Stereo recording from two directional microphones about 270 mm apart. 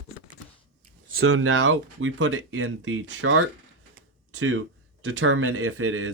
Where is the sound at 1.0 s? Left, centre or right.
Right.